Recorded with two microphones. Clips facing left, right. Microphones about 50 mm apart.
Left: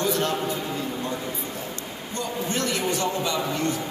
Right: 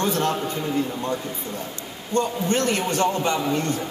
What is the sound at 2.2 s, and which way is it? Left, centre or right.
A woman's voice, right.